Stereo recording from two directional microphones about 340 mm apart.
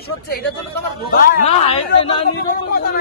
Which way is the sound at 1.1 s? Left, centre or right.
Left.